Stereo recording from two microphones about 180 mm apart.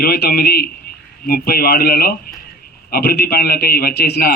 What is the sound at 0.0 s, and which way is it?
A man's voice, 55° left (ahead or behind).